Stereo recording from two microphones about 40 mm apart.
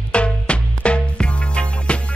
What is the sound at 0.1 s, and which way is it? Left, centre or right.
Music, left.